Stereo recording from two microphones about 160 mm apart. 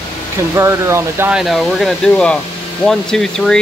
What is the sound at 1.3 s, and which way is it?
Speech, centre (ahead or behind).